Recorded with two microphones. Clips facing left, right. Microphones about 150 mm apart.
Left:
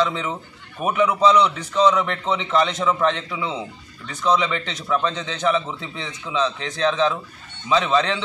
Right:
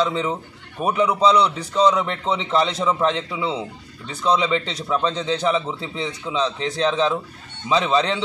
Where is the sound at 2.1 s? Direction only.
Centre (ahead or behind).